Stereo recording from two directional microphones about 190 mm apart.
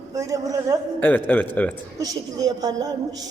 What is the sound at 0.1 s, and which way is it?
Speech, 15° right (ahead or behind).